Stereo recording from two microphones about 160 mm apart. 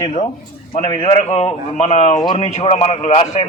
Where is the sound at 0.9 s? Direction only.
40° left (ahead or behind).